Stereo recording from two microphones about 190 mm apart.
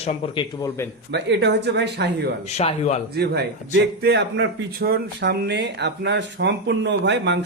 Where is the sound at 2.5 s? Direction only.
35° left (ahead or behind).